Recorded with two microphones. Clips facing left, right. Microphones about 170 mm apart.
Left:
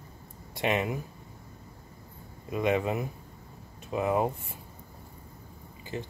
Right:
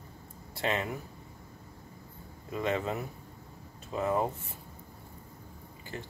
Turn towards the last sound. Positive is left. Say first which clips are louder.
# left 5 dB
turn(degrees=20)  # may be behind; listen again after turning